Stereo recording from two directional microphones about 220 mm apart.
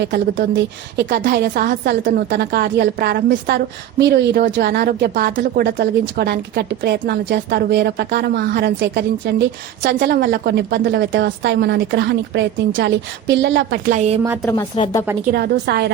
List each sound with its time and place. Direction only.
0.0 s a woman's voice: 50° right (ahead or behind)
13.9 s a woman's voice: 30° right (ahead or behind)
14.4 s speech: 10° left (ahead or behind)
15.3 s a woman's voice: 45° right (ahead or behind)